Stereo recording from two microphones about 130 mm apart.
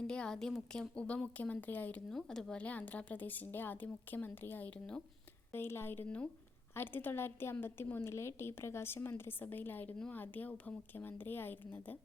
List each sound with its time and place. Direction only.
0.1 s a woman's voice: 5° left (ahead or behind)